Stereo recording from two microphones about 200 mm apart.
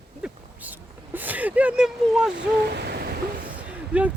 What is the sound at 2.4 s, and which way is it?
Owl, 55° right (ahead or behind).